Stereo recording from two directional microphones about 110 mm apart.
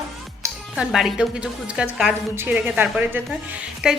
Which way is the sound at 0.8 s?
5° right (ahead or behind).